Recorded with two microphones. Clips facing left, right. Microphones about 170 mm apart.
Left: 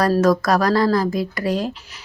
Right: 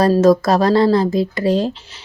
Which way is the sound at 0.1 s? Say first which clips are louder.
Right 4 dB; 25° right (ahead or behind).